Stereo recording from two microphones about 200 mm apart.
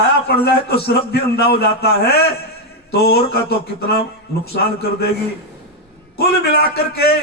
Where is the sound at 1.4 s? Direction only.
50° left (ahead or behind).